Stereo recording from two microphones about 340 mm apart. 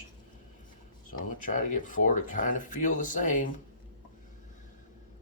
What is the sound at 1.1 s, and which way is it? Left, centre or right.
Speech, left.